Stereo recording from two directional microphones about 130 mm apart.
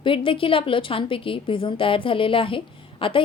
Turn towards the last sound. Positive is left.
turn(degrees=40)  # may be behind; listen again after turning